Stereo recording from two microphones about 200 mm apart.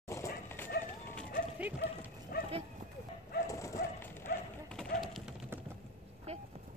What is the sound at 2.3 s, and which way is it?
Livestock, 45° left (ahead or behind).